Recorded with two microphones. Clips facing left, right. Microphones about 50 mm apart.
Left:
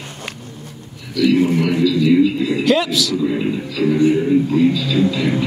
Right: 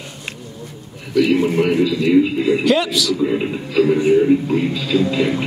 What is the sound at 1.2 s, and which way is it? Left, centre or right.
Speech, right.